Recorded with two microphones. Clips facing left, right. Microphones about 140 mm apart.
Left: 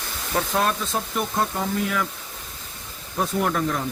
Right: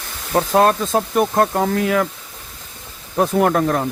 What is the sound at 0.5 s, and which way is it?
Speech, 50° right (ahead or behind).